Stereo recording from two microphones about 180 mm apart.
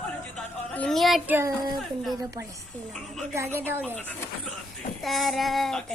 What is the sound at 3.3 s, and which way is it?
Speech, 15° right (ahead or behind).